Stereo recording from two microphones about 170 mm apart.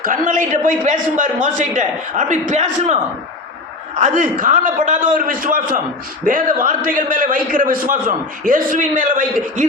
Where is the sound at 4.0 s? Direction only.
50° right (ahead or behind).